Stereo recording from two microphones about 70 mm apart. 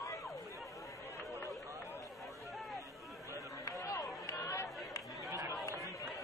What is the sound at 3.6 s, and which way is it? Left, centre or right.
Run, left.